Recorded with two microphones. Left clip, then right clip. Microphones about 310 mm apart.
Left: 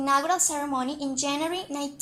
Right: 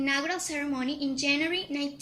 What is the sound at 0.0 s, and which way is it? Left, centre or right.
A woman's voice, left.